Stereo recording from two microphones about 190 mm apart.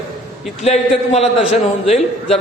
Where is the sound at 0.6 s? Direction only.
35° left (ahead or behind).